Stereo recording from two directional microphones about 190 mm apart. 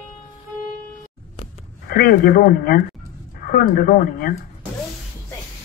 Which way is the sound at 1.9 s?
50° left (ahead or behind).